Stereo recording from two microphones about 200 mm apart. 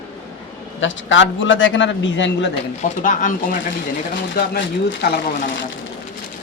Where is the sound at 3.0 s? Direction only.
40° left (ahead or behind).